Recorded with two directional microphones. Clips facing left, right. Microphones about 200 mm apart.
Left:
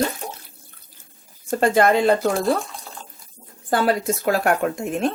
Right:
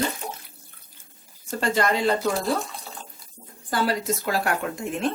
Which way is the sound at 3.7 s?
50° left (ahead or behind).